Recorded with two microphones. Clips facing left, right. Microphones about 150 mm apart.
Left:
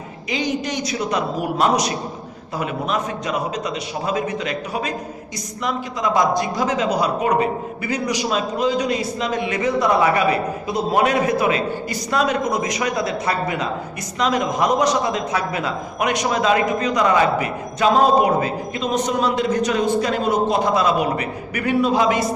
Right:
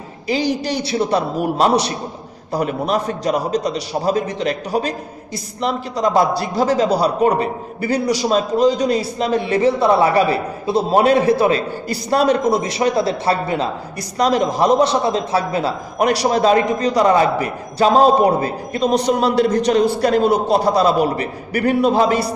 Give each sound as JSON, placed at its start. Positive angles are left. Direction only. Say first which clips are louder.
{"t": 0.3, "sound": "a man's voice", "louder": "right 4 dB", "side_deg": -35}